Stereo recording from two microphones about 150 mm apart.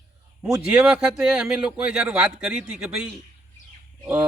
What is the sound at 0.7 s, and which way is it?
Speech, 5° right (ahead or behind).